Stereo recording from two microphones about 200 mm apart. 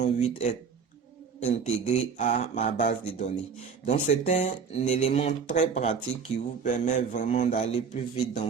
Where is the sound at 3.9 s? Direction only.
35° left (ahead or behind).